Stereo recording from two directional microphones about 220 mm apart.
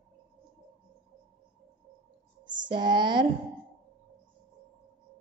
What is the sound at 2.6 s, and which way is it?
Speech, 20° right (ahead or behind).